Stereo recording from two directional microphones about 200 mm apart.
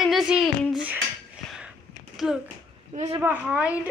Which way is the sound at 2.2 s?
Centre (ahead or behind).